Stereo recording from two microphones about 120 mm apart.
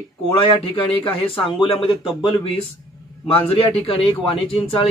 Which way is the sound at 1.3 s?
45° left (ahead or behind).